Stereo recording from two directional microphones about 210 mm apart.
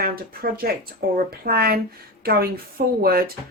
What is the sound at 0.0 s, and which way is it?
Speech, 45° right (ahead or behind).